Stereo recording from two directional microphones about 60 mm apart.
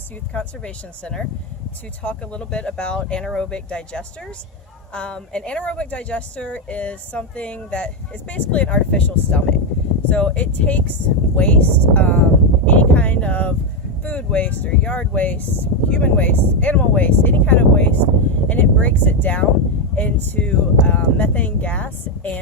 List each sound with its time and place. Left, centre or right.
0.3 s speech: centre
12.6 s a sound: left
14.0 s speech: left